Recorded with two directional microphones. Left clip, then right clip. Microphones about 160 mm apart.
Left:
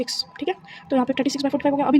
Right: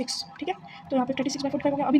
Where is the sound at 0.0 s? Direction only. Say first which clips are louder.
Left 5 dB; 40° left (ahead or behind).